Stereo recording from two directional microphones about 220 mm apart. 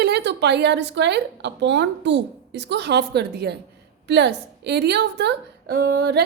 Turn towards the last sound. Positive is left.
turn(degrees=-50)  # may be behind; listen again after turning